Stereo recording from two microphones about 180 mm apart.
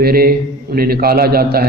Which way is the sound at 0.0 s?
60° right (ahead or behind).